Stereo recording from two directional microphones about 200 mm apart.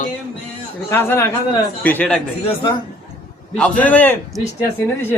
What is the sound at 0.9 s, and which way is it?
A man's voice, 10° left (ahead or behind).